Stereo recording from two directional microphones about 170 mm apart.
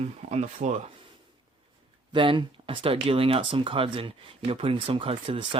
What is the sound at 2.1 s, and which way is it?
Speech, 30° right (ahead or behind).